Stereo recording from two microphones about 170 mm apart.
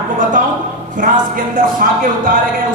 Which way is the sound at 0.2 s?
50° right (ahead or behind).